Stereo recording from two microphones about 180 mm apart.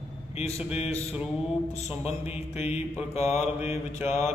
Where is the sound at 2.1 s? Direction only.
35° left (ahead or behind).